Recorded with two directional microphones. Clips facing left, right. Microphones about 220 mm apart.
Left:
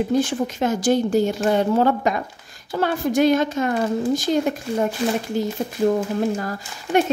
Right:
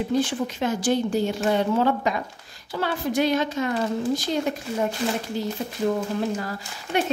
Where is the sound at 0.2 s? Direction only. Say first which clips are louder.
Left 3 dB; 45° left (ahead or behind).